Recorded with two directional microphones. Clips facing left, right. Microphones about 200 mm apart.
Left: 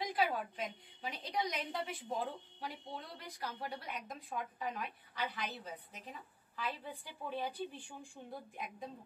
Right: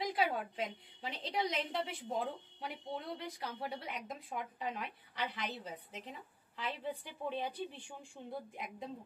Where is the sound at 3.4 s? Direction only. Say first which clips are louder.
Left 2 dB; 25° right (ahead or behind).